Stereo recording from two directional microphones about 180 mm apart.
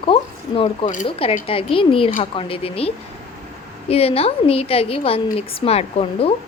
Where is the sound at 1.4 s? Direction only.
30° left (ahead or behind).